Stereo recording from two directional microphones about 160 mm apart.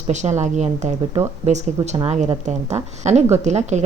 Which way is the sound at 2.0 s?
40° right (ahead or behind).